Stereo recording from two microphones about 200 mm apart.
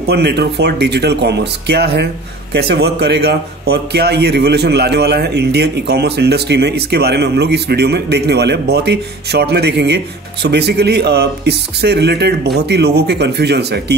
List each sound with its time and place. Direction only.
0.0 s a man's voice: 55° right (ahead or behind)